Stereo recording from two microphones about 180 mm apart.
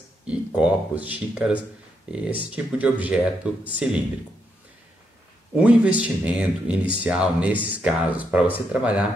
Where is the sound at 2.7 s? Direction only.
10° right (ahead or behind).